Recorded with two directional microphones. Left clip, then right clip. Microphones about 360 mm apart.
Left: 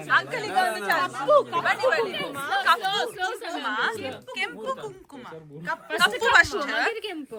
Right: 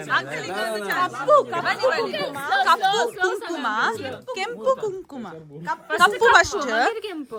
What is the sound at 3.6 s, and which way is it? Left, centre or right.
Speech, centre.